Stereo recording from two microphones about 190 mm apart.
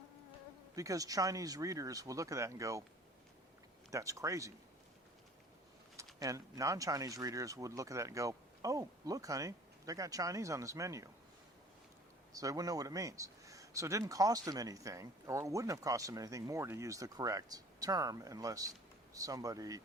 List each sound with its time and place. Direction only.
0.8 s speech: 20° right (ahead or behind)
3.9 s speech: 15° right (ahead or behind)
6.1 s speech: 15° right (ahead or behind)
12.3 s speech: 20° right (ahead or behind)